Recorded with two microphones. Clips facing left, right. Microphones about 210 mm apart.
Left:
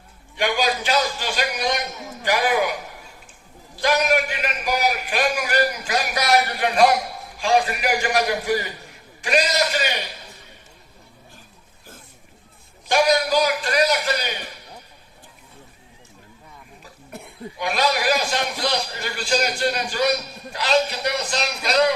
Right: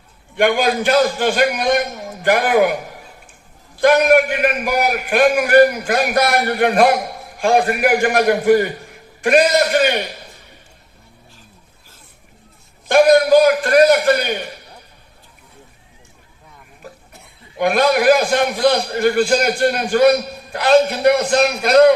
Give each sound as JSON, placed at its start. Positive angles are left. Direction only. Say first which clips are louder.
{"t": 0.3, "sound": "a man's voice", "louder": "right 7 dB", "side_deg": -55}
{"t": 3.8, "sound": "a man's voice", "louder": "right 8 dB", "side_deg": -55}
{"t": 12.9, "sound": "a man's voice", "louder": "right 8 dB", "side_deg": -55}
{"t": 17.1, "sound": "cough", "louder": "left 8 dB", "side_deg": 55}
{"t": 17.6, "sound": "a man's voice", "louder": "right 8 dB", "side_deg": -55}